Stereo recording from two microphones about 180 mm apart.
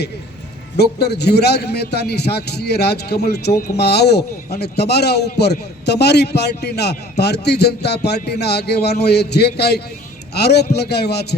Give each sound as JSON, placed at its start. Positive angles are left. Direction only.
{"t": 0.8, "sound": "a man's voice", "side_deg": 65}